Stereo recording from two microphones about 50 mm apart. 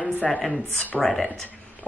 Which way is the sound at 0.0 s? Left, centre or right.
Left.